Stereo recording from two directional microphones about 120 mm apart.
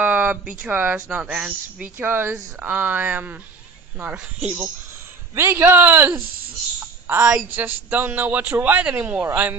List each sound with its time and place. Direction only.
0.0 s a man's voice: 10° right (ahead or behind)